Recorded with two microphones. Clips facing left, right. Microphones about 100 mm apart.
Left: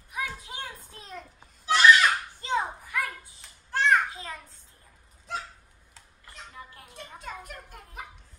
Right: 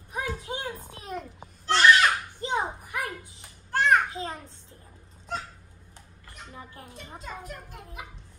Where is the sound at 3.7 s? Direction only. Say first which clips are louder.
Right 1 dB; 5° right (ahead or behind).